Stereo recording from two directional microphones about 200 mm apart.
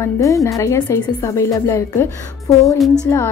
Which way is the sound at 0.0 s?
15° left (ahead or behind).